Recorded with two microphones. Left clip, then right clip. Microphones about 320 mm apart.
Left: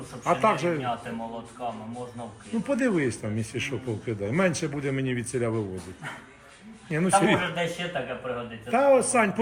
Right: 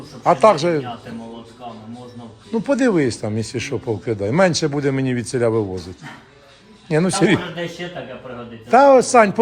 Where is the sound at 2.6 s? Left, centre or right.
Centre.